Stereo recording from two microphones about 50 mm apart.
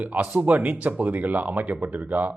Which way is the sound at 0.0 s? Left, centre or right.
Right.